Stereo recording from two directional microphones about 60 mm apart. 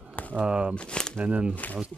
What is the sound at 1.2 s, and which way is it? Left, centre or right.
Speech, right.